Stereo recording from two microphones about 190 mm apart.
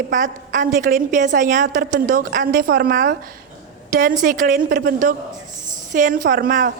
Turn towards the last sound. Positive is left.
turn(degrees=-45)  # may be behind; listen again after turning